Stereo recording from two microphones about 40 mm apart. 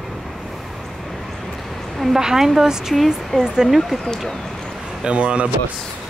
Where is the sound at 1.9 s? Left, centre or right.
Centre.